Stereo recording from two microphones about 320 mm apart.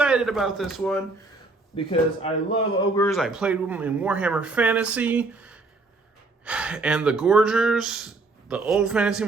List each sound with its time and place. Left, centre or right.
0.0 s speech: centre
1.7 s speech: centre
3.1 s speech: centre